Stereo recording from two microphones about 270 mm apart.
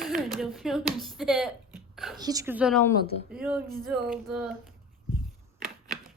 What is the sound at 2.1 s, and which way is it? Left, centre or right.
Speech, centre.